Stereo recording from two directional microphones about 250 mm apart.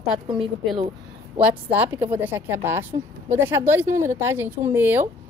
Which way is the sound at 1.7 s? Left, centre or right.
Centre.